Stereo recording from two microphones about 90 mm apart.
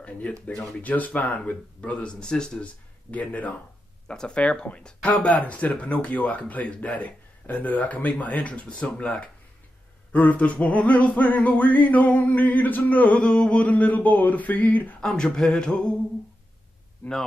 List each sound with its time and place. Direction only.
0.8 s male singing: 15° left (ahead or behind)
15.0 s male singing: 10° left (ahead or behind)
17.0 s male singing: 20° left (ahead or behind)